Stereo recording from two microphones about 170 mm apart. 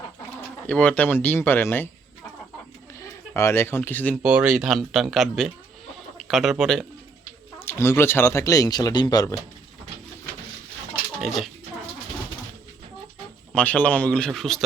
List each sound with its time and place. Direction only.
0.7 s speech: 10° left (ahead or behind)
3.0 s speech: 15° left (ahead or behind)
4.1 s speech: 5° right (ahead or behind)
7.6 s speech: 15° left (ahead or behind)
11.2 s speech: centre (ahead or behind)
13.5 s speech: 10° left (ahead or behind)